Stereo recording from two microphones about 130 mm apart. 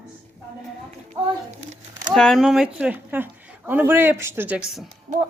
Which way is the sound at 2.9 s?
15° right (ahead or behind).